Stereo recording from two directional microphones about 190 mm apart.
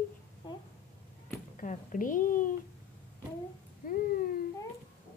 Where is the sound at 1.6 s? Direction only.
45° left (ahead or behind).